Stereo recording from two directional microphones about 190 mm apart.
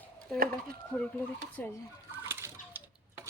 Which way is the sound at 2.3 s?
15° right (ahead or behind).